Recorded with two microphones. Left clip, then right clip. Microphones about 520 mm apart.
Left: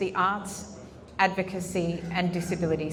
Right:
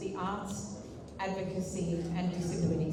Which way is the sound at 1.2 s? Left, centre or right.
Left.